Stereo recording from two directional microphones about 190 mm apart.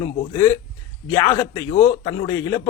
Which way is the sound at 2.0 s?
15° left (ahead or behind).